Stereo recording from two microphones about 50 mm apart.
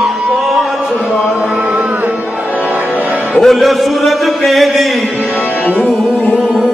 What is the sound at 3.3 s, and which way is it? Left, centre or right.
Music, centre.